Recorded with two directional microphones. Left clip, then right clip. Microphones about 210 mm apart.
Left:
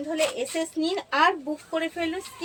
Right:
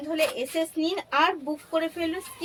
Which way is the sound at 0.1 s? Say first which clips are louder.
Even; 20° right (ahead or behind).